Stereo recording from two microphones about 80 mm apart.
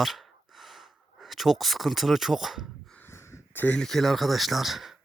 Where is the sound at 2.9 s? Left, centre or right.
Left.